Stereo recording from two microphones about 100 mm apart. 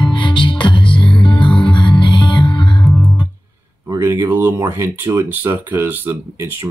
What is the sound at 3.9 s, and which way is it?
Speech, 25° right (ahead or behind).